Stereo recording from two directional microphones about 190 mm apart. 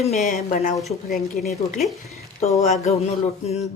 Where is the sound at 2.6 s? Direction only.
35° left (ahead or behind).